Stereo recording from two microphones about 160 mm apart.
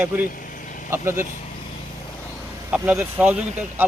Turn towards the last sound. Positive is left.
turn(degrees=-10)  # may be behind; listen again after turning